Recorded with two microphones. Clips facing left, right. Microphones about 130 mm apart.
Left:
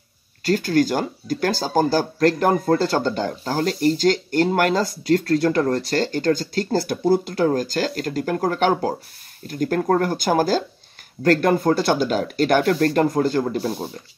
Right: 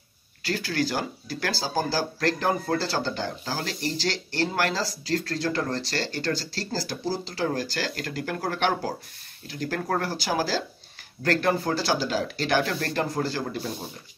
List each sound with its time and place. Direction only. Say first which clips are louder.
0.4 s speech: left 9 dB; 45° left (ahead or behind)